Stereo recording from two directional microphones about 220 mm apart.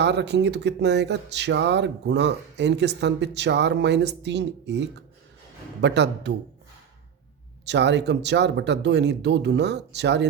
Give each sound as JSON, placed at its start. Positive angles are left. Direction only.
{"t": 0.0, "sound": "speech", "side_deg": -50}
{"t": 7.6, "sound": "speech", "side_deg": -50}